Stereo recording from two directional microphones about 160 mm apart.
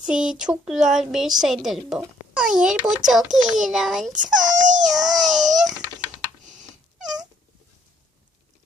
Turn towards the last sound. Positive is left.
turn(degrees=-5)  # may be behind; listen again after turning